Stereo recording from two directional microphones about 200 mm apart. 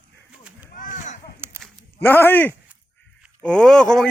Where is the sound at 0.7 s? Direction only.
40° left (ahead or behind).